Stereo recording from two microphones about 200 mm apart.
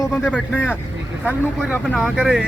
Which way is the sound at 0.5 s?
10° left (ahead or behind).